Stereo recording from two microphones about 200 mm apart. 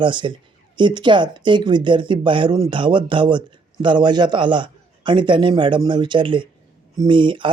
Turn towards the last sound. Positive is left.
turn(degrees=-25)  # may be behind; listen again after turning